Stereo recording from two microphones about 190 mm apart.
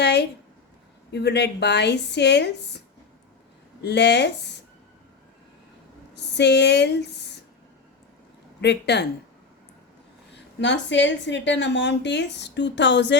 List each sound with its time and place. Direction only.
0.0 s a sound: 60° left (ahead or behind)
1.1 s speech: 65° left (ahead or behind)
3.8 s speech: 65° left (ahead or behind)
6.1 s speech: 65° left (ahead or behind)
8.6 s speech: 65° left (ahead or behind)
10.3 s a woman's voice: 70° left (ahead or behind)